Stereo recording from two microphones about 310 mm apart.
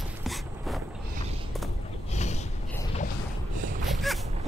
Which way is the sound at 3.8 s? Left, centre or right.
Centre.